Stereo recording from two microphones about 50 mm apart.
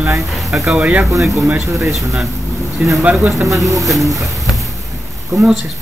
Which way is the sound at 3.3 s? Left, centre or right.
Right.